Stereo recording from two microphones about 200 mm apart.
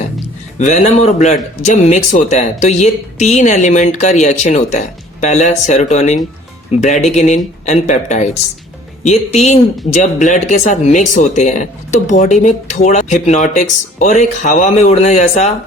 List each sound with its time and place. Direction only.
0.6 s speech: 35° left (ahead or behind)